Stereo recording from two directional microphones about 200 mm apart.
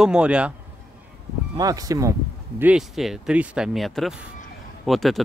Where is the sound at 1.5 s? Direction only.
15° right (ahead or behind).